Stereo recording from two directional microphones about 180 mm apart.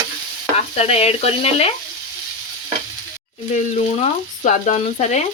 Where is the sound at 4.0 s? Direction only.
40° left (ahead or behind).